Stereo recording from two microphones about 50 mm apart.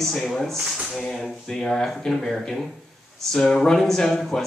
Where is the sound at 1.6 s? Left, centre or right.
Centre.